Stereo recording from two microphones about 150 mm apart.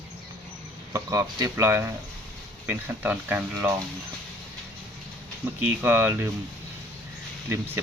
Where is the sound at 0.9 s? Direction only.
20° right (ahead or behind).